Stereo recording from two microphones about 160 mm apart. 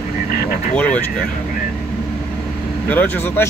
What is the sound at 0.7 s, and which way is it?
Speech, 10° left (ahead or behind).